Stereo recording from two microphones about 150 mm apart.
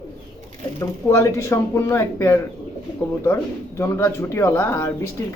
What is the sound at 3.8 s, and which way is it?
Speech, 15° left (ahead or behind).